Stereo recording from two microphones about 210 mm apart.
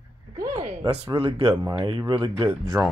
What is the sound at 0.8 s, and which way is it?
Speech, 25° right (ahead or behind).